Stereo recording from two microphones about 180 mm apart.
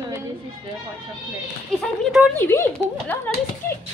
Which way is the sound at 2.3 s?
15° left (ahead or behind).